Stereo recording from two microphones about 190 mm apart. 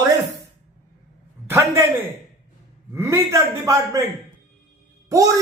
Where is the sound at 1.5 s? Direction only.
15° right (ahead or behind).